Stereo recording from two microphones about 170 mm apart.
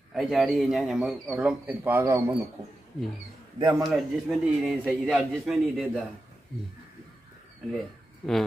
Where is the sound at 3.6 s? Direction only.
20° right (ahead or behind).